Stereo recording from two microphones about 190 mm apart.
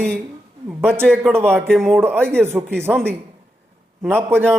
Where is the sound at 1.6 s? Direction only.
Centre (ahead or behind).